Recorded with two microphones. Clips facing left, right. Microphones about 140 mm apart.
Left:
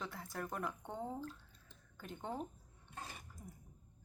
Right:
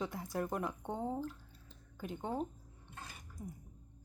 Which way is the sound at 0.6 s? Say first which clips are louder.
Right 4 dB; 15° right (ahead or behind).